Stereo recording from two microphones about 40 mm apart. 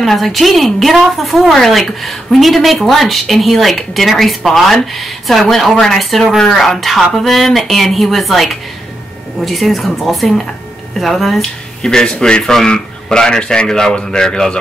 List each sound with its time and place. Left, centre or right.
0.0 s a woman's voice: centre
11.8 s speech: centre